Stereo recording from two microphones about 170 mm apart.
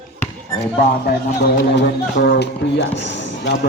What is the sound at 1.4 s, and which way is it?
Speech, 75° left (ahead or behind).